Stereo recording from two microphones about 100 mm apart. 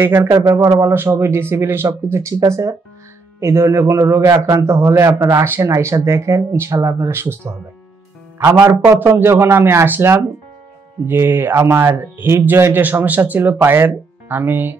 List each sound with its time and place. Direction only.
0.0 s a man's voice: 25° right (ahead or behind)
8.6 s a man's voice: 20° right (ahead or behind)